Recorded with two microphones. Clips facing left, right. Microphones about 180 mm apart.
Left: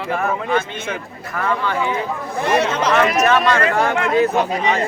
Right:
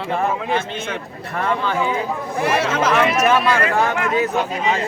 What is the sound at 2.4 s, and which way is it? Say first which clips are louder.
Speech: left 1 dB; 5° right (ahead or behind).